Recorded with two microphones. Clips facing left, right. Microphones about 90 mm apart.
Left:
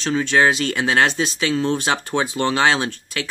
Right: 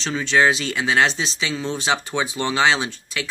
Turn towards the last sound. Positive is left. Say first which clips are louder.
# left 2 dB
turn(degrees=45)  # may be behind; listen again after turning